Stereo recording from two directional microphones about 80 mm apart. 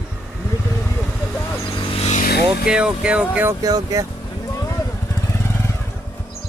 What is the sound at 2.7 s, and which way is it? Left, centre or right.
Speech, centre.